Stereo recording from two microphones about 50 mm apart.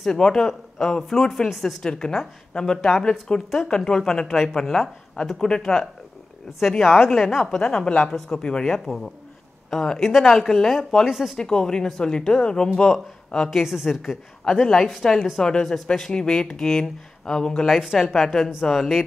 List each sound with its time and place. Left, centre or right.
0.0 s a woman's voice: centre
1.8 s a woman's voice: centre
6.6 s a woman's voice: centre
11.1 s speech: centre
11.3 s a woman's voice: centre
13.5 s speech: centre
14.4 s a woman's voice: centre
17.6 s a woman's voice: centre